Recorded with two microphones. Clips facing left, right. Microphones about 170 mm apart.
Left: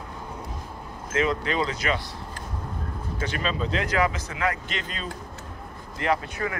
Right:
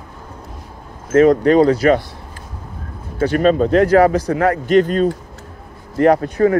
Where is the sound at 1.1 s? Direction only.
45° right (ahead or behind).